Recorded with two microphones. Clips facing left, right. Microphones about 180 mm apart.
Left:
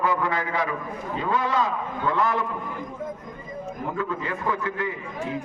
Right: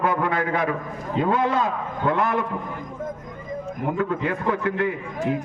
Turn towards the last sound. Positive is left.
turn(degrees=-60)  # may be behind; listen again after turning